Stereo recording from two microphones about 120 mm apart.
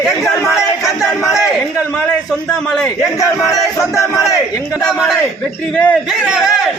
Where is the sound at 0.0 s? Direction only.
Centre (ahead or behind).